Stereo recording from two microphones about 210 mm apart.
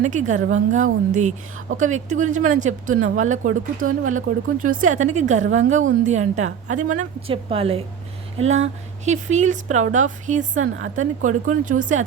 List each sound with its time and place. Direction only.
0.0 s a woman's voice: 35° right (ahead or behind)
10.6 s speech: 65° right (ahead or behind)
10.9 s a woman's voice: 35° right (ahead or behind)